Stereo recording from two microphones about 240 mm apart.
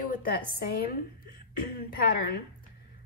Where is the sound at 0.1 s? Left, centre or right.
Left.